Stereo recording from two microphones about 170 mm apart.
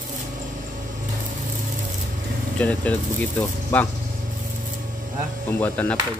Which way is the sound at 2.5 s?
10° left (ahead or behind).